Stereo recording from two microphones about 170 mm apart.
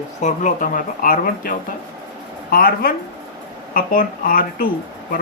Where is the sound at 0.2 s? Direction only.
45° left (ahead or behind).